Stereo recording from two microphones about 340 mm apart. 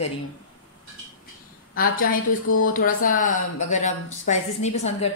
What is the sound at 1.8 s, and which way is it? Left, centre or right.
A woman's voice, left.